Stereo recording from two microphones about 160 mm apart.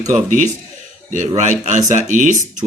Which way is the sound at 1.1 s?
50° right (ahead or behind).